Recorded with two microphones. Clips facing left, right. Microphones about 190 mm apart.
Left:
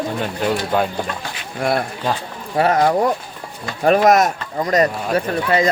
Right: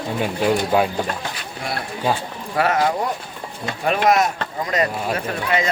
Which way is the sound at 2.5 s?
30° left (ahead or behind).